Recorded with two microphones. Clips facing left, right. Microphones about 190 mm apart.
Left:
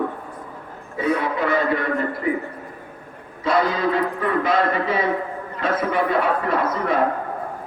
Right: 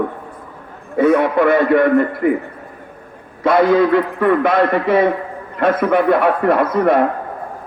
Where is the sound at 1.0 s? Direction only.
60° right (ahead or behind).